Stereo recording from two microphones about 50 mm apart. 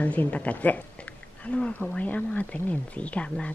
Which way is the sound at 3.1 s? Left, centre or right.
Left.